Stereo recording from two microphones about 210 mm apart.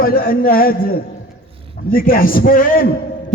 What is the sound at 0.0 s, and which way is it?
Speech, 45° left (ahead or behind).